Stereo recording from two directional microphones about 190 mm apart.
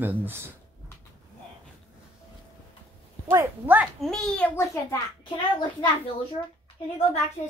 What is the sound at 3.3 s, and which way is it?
Speech, 10° right (ahead or behind).